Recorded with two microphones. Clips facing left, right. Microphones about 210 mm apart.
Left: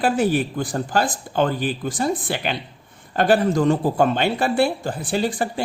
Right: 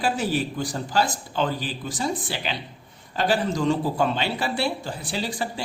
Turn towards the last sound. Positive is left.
turn(degrees=50)  # may be behind; listen again after turning